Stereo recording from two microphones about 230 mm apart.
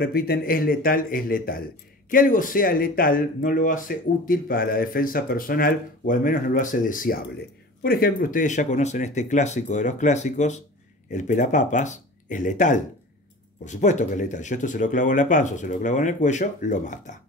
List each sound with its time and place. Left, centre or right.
0.0 s speech: left